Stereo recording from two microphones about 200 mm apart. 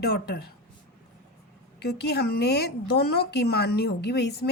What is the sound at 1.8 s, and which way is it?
Speech, 55° left (ahead or behind).